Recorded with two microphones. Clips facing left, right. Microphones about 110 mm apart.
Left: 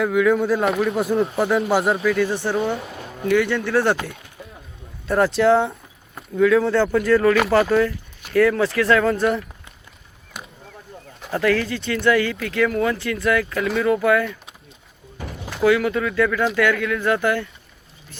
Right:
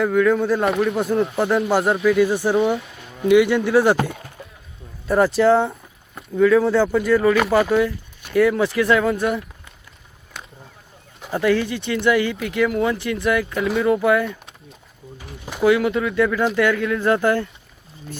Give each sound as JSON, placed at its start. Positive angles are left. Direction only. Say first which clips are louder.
{"t": 0.0, "sound": "speech", "louder": "right 1 dB", "side_deg": 5}
{"t": 5.0, "sound": "speech", "louder": "right 1 dB", "side_deg": 0}
{"t": 11.3, "sound": "speech", "louder": "right 1 dB", "side_deg": -20}
{"t": 15.6, "sound": "speech", "louder": "right 1 dB", "side_deg": -20}